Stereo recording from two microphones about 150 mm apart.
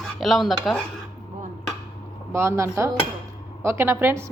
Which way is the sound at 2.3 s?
20° right (ahead or behind).